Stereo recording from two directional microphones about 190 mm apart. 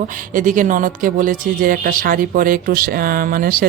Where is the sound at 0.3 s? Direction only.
45° right (ahead or behind).